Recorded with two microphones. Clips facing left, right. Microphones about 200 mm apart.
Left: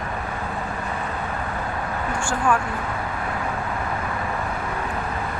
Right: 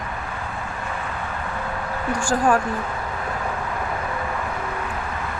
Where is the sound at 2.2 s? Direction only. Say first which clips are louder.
Right 3 dB; 35° right (ahead or behind).